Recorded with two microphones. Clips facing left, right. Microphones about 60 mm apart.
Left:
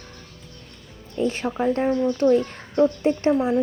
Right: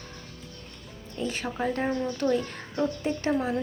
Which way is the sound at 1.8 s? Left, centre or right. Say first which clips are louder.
Left 7 dB; centre.